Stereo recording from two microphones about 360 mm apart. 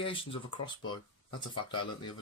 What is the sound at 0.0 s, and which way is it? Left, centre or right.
Speech, centre.